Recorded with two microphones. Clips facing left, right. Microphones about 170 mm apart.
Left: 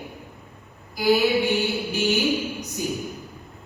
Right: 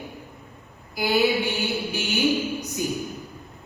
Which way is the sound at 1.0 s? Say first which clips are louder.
Left 2 dB; centre (ahead or behind).